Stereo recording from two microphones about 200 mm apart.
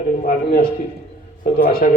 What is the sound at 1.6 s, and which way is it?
Speech, 50° left (ahead or behind).